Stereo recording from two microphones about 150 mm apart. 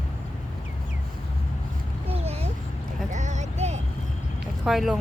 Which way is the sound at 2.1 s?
40° right (ahead or behind).